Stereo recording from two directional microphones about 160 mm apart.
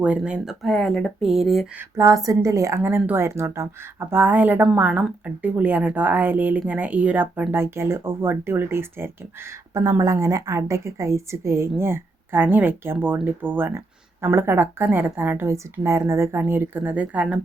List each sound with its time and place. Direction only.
0.0 s speech: 5° right (ahead or behind)
2.0 s a woman's voice: 20° right (ahead or behind)